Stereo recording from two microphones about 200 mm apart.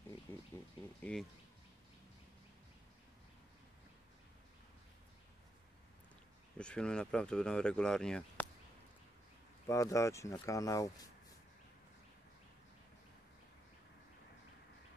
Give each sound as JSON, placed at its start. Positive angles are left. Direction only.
{"t": 0.3, "sound": "a sound", "side_deg": 10}
{"t": 1.1, "sound": "speech", "side_deg": 5}
{"t": 6.6, "sound": "speech", "side_deg": 5}
{"t": 9.7, "sound": "speech", "side_deg": 15}